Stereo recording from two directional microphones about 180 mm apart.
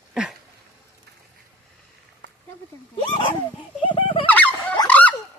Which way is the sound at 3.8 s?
30° left (ahead or behind).